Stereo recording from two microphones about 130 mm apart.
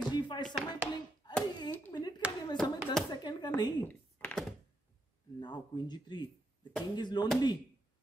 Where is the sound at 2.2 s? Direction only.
10° right (ahead or behind).